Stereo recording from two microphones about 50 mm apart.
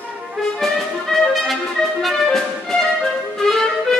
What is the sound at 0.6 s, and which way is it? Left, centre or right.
Music, centre.